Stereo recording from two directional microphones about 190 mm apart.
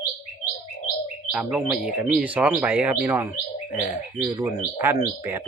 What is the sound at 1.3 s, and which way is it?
Speech, 5° right (ahead or behind).